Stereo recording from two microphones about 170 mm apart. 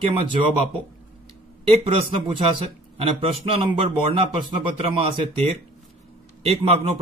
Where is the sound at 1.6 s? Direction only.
35° right (ahead or behind).